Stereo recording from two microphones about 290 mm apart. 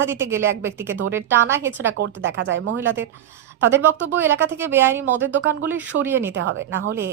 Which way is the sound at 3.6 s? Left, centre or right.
Centre.